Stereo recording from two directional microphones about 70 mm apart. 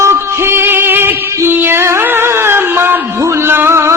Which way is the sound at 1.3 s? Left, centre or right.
Right.